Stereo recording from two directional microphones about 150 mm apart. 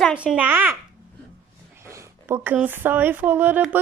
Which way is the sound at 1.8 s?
20° right (ahead or behind).